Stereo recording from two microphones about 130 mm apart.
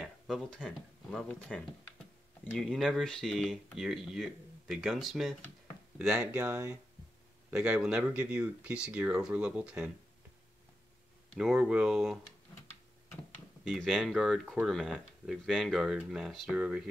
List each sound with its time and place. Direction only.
0.0 s speech: 5° left (ahead or behind)
11.3 s speech: 5° right (ahead or behind)
13.7 s speech: centre (ahead or behind)